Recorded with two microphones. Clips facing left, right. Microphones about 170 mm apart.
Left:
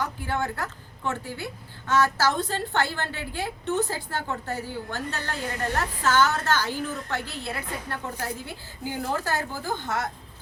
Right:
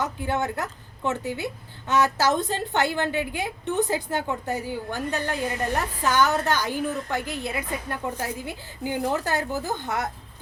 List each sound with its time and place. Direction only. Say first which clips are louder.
0.0 s a woman's voice: right 2 dB; 20° right (ahead or behind)